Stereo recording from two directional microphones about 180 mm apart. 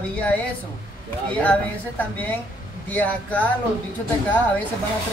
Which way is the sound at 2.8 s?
10° left (ahead or behind).